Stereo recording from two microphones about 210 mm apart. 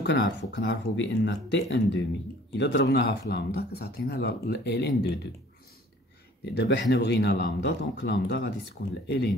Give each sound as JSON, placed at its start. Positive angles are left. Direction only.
{"t": 0.0, "sound": "speech", "side_deg": 60}
{"t": 6.4, "sound": "speech", "side_deg": 55}